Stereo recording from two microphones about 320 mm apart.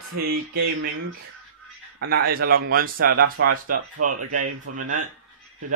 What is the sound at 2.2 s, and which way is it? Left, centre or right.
Speech, right.